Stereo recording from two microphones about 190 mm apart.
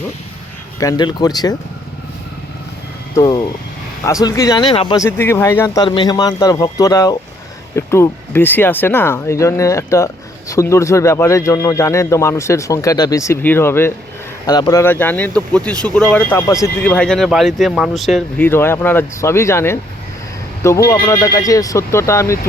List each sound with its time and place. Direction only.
0.8 s speech: 20° left (ahead or behind)
3.2 s speech: 20° left (ahead or behind)
4.9 s speech: 15° left (ahead or behind)
18.4 s speech: 10° left (ahead or behind)